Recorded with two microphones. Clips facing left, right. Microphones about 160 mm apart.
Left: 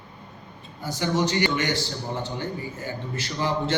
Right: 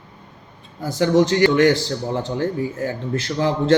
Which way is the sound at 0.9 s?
90° right.